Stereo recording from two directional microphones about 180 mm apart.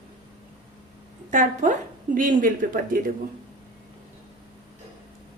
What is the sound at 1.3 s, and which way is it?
A woman's voice, 45° right (ahead or behind).